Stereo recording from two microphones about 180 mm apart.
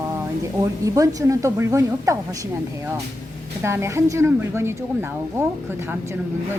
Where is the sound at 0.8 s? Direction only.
20° right (ahead or behind).